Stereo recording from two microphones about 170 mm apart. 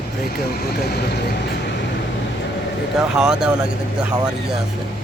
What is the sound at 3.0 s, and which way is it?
Speech, 5° right (ahead or behind).